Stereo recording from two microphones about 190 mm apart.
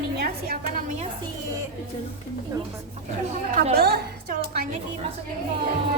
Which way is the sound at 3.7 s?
55° right (ahead or behind).